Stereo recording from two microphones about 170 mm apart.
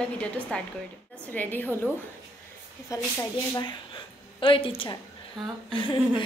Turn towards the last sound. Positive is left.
turn(degrees=30)  # may be behind; listen again after turning